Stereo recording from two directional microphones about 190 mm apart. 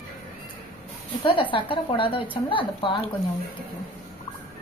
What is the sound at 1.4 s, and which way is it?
A woman's voice, 25° left (ahead or behind).